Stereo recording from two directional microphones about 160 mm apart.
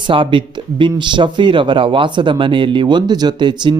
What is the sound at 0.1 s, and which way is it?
Speech, 30° right (ahead or behind).